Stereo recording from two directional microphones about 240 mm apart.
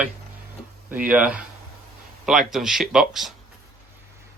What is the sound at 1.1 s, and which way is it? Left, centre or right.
Speech, centre.